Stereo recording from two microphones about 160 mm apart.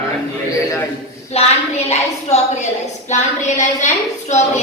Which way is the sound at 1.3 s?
40° left (ahead or behind).